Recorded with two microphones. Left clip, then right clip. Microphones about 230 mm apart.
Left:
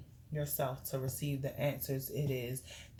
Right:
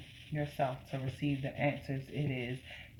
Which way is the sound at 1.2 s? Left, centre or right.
Left.